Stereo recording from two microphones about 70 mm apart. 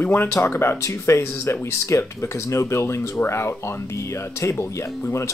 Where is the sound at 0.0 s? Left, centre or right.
Left.